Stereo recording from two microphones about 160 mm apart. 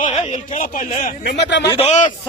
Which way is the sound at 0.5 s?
50° left (ahead or behind).